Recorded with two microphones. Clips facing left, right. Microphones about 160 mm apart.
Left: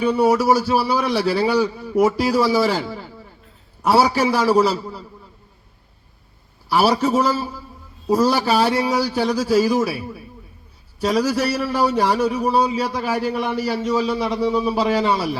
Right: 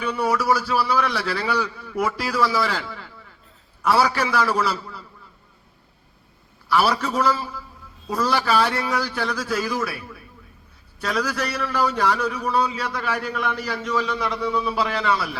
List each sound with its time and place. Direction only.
0.0 s a man's voice: 30° left (ahead or behind)
6.7 s a man's voice: 30° left (ahead or behind)